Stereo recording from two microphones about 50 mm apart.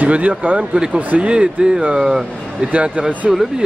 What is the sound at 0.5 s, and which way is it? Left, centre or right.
Speech, centre.